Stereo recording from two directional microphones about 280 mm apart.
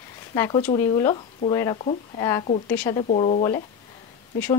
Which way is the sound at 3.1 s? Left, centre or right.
Left.